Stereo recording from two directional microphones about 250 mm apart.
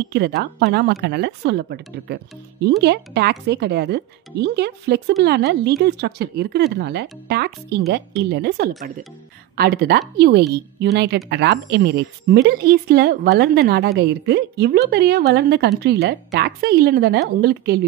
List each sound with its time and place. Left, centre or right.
0.0 s speech: right
2.8 s speech: right